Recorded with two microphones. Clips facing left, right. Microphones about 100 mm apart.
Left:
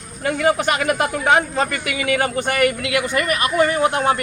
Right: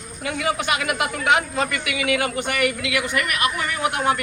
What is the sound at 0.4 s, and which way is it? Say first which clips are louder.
Speech: left 5 dB; 40° left (ahead or behind).